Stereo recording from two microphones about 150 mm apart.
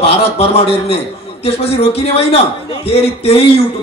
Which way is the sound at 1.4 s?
40° left (ahead or behind).